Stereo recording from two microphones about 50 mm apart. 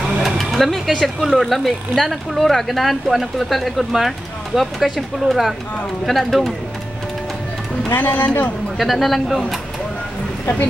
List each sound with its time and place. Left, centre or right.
0.2 s a sound: centre
1.0 s speech: centre
7.9 s speech: left
8.7 s speech: centre